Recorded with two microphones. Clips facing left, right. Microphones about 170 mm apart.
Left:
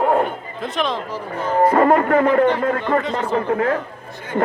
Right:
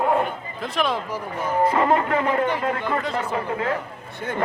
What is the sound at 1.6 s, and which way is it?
Speech, 50° left (ahead or behind).